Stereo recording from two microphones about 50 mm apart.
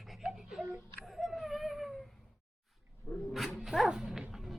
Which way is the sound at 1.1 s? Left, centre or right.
Centre.